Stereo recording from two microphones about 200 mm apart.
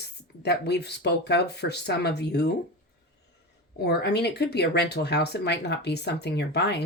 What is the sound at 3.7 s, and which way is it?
Speech, 55° left (ahead or behind).